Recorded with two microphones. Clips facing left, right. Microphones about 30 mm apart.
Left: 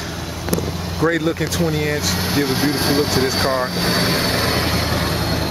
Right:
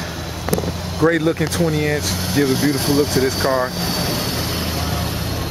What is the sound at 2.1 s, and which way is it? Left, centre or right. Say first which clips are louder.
Speech: right 1 dB; left.